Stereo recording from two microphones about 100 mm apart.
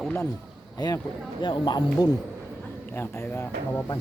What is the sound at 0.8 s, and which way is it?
Speech, 40° left (ahead or behind).